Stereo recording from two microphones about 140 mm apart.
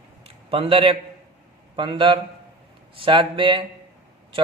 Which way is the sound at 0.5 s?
40° right (ahead or behind).